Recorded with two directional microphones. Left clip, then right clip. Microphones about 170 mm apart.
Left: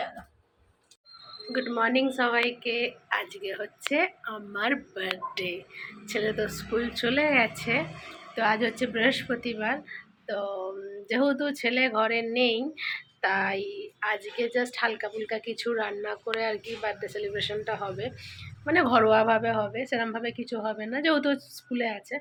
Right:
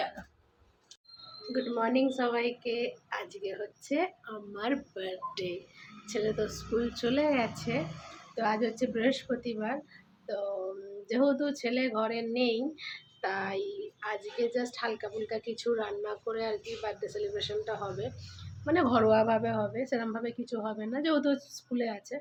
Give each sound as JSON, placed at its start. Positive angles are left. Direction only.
{"t": 1.7, "sound": "a woman's voice", "side_deg": -5}